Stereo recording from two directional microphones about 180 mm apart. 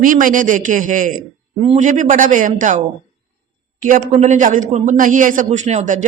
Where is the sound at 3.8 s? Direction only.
45° right (ahead or behind).